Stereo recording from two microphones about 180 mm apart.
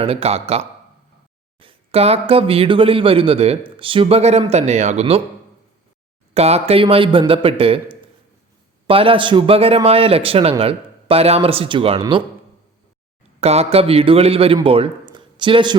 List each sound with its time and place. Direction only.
0.0 s speech: 35° right (ahead or behind)
6.3 s speech: 35° right (ahead or behind)
13.4 s speech: 35° right (ahead or behind)